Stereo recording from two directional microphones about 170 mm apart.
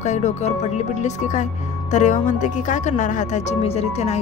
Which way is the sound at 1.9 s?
45° left (ahead or behind).